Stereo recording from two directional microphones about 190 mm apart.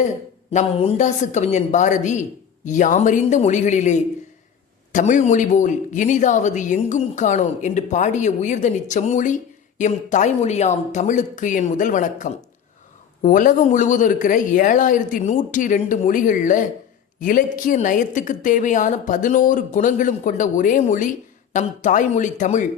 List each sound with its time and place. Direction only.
0.5 s a woman's voice: 35° left (ahead or behind)